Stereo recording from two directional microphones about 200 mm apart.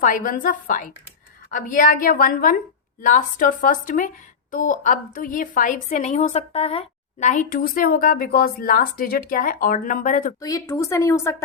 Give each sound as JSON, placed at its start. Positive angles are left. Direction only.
{"t": 0.0, "sound": "a woman's voice", "side_deg": 45}
{"t": 10.4, "sound": "speech", "side_deg": 15}